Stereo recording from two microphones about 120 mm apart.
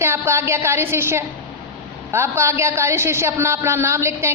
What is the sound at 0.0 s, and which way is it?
A woman's voice, 20° right (ahead or behind).